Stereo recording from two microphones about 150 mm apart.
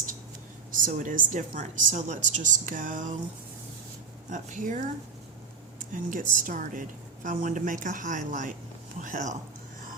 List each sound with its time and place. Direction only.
0.7 s a woman's voice: 60° right (ahead or behind)
4.3 s a woman's voice: 60° right (ahead or behind)
5.9 s a woman's voice: 60° right (ahead or behind)